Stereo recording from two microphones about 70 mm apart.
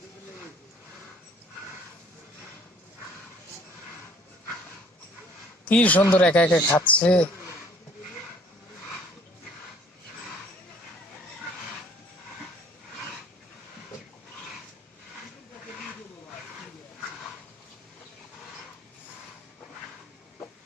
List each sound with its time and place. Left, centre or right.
5.6 s speech: left